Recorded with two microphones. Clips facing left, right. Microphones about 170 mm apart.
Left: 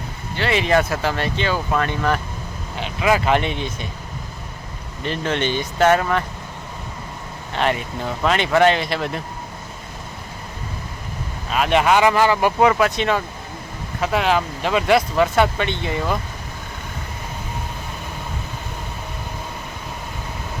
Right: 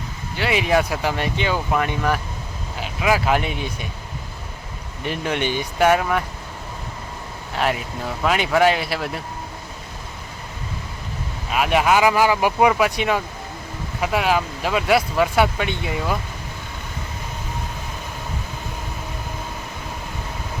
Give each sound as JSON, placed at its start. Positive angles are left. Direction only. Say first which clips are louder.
{"t": 0.3, "sound": "speech", "louder": "left 1 dB", "side_deg": -10}
{"t": 5.0, "sound": "speech", "louder": "left 1 dB", "side_deg": -10}
{"t": 7.5, "sound": "speech", "louder": "left 1 dB", "side_deg": -5}
{"t": 11.5, "sound": "speech", "louder": "left 1 dB", "side_deg": -5}